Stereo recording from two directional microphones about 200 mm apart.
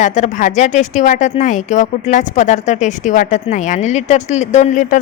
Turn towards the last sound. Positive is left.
turn(degrees=40)  # may be behind; listen again after turning